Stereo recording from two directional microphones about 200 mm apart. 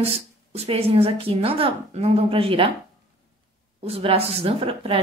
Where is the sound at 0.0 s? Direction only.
30° right (ahead or behind).